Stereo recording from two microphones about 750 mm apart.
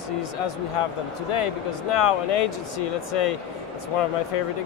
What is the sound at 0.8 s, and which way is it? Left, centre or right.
Speech, left.